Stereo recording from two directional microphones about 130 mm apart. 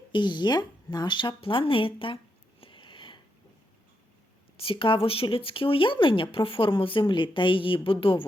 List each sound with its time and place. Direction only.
0.1 s speech: 35° left (ahead or behind)
2.6 s sniff: 40° left (ahead or behind)
4.5 s speech: 45° left (ahead or behind)